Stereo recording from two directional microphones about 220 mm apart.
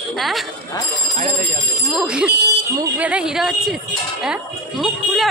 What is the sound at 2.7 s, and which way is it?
Speech, 15° right (ahead or behind).